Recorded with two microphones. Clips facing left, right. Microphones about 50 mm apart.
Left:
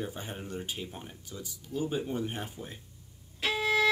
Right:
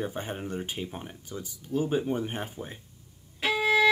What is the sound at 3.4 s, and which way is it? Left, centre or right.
Music, centre.